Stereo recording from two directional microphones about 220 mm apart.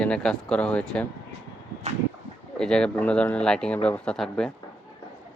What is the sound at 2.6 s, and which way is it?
Speech, 5° left (ahead or behind).